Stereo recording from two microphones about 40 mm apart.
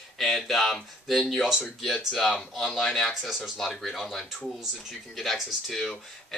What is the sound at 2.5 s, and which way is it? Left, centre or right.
Speech, centre.